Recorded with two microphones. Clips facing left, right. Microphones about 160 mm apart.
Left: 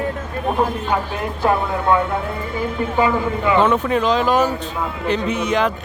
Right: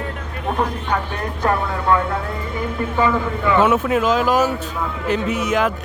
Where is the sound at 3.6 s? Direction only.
5° right (ahead or behind).